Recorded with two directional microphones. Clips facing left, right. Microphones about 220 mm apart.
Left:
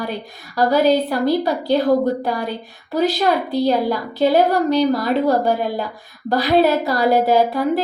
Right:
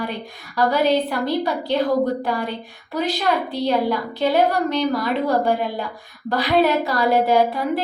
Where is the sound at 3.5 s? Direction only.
40° left (ahead or behind).